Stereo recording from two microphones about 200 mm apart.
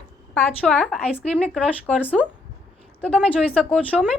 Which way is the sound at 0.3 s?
5° left (ahead or behind).